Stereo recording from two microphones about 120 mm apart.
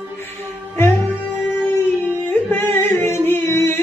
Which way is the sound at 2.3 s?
20° left (ahead or behind).